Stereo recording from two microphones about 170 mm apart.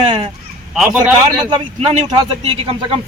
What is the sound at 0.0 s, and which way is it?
Speech, 35° right (ahead or behind).